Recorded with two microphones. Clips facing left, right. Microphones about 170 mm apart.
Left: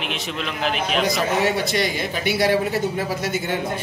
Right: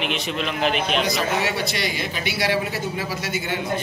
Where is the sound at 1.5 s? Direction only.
50° left (ahead or behind).